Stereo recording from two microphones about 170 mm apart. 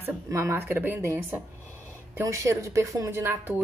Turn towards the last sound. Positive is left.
turn(degrees=-15)  # may be behind; listen again after turning